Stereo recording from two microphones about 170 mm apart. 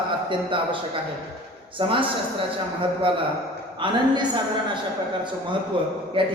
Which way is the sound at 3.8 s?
30° right (ahead or behind).